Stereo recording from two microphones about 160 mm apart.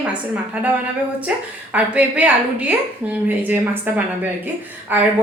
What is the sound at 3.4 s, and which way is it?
Speech, 10° right (ahead or behind).